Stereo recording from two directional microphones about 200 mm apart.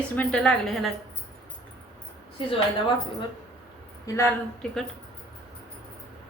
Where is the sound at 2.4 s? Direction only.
25° left (ahead or behind).